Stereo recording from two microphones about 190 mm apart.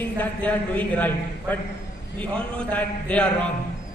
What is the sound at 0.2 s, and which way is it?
A man's voice, 10° left (ahead or behind).